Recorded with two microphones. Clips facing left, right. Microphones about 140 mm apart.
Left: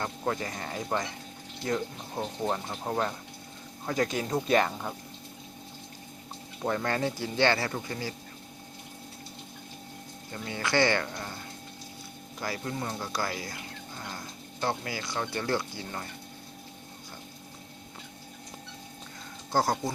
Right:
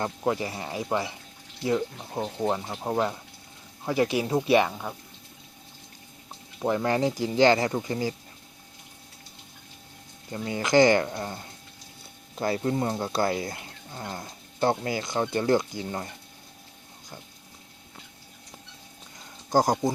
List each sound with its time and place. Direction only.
0.0 s speech: 10° right (ahead or behind)
6.6 s speech: 15° right (ahead or behind)
10.3 s speech: 25° right (ahead or behind)
12.4 s speech: 30° right (ahead or behind)
19.5 s speech: 15° right (ahead or behind)